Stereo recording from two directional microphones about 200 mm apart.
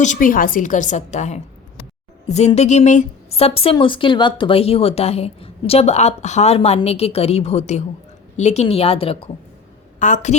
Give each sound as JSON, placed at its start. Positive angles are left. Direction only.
{"t": 0.0, "sound": "a woman's voice", "side_deg": 40}
{"t": 10.0, "sound": "speech", "side_deg": 40}